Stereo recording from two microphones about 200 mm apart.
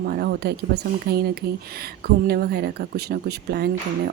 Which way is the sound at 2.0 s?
55° right (ahead or behind).